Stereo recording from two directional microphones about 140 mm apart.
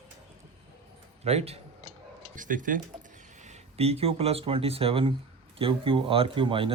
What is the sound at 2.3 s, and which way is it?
Speech, 70° right (ahead or behind).